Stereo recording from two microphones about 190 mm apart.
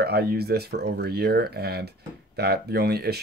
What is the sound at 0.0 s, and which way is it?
Speech, 55° right (ahead or behind).